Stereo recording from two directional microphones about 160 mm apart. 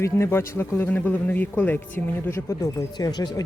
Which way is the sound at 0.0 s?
15° left (ahead or behind).